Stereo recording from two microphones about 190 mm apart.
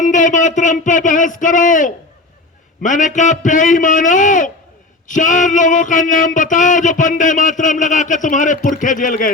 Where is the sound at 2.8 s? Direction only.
40° left (ahead or behind).